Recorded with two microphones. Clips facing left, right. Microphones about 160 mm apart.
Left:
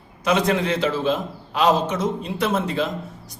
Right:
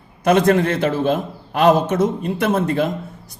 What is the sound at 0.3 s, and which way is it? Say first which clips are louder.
A man's voice: right 5 dB; 50° right (ahead or behind).